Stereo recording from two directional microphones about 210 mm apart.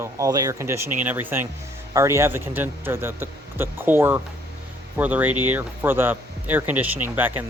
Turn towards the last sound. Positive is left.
turn(degrees=-10)  # may be behind; listen again after turning